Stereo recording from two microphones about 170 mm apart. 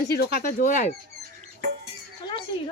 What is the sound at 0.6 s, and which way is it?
Speech, 45° left (ahead or behind).